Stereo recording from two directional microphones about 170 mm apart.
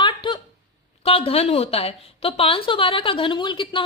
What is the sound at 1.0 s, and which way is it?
A woman's voice, 35° left (ahead or behind).